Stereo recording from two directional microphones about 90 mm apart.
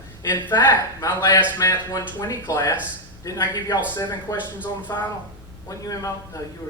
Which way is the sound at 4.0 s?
50° left (ahead or behind).